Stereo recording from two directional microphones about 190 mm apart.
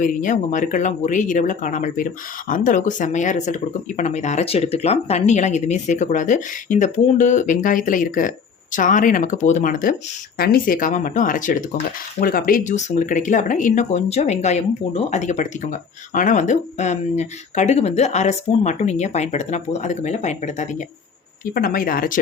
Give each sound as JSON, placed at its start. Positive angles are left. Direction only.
{"t": 0.0, "sound": "speech", "side_deg": 45}
{"t": 21.5, "sound": "speech", "side_deg": 50}